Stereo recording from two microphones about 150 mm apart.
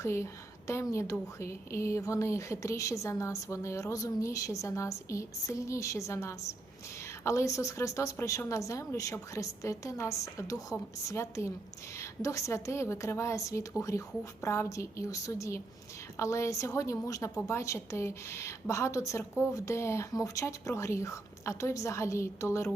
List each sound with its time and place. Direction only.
0.0 s a woman's voice: 20° left (ahead or behind)